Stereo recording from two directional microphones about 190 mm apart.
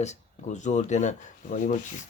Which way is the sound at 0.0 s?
40° left (ahead or behind).